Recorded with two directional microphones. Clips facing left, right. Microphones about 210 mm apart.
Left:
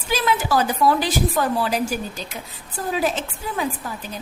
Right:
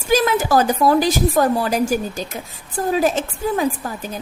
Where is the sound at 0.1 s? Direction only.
45° right (ahead or behind).